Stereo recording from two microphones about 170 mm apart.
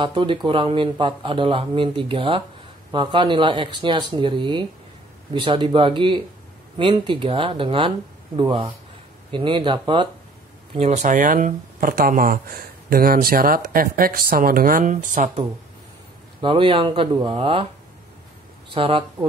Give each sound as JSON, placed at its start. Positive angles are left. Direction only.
{"t": 0.0, "sound": "a man's voice", "side_deg": -30}
{"t": 10.9, "sound": "speech", "side_deg": -50}
{"t": 16.3, "sound": "speech", "side_deg": -30}
{"t": 18.7, "sound": "speech", "side_deg": -30}